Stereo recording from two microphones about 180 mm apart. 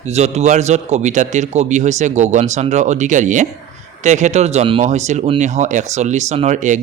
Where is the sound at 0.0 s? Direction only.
35° right (ahead or behind).